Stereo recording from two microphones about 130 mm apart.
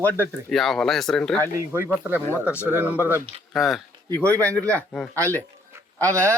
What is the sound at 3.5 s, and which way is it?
Speech, centre (ahead or behind).